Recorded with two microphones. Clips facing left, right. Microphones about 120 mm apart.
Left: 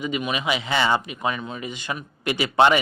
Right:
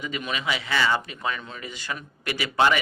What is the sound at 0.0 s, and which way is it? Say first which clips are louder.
A man's voice: left 4 dB; 20° left (ahead or behind).